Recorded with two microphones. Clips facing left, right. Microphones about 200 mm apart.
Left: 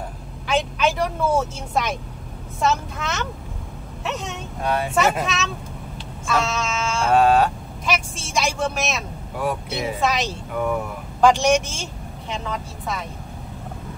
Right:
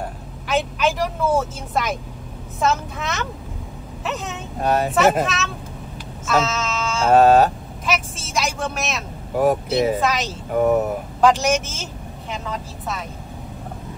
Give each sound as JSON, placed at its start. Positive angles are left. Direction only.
{"t": 0.5, "sound": "a woman's voice", "side_deg": 0}
{"t": 4.6, "sound": "speech", "side_deg": -40}
{"t": 5.2, "sound": "a woman's voice", "side_deg": 0}
{"t": 6.2, "sound": "a sound", "side_deg": 0}
{"t": 7.1, "sound": "a sound", "side_deg": -40}
{"t": 7.8, "sound": "a woman's voice", "side_deg": 0}
{"t": 9.3, "sound": "speech", "side_deg": -40}
{"t": 9.9, "sound": "a woman's voice", "side_deg": 0}
{"t": 10.7, "sound": "a sound", "side_deg": -45}
{"t": 11.1, "sound": "a man's voice", "side_deg": 0}